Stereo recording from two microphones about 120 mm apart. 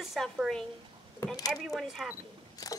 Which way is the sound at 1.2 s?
30° left (ahead or behind).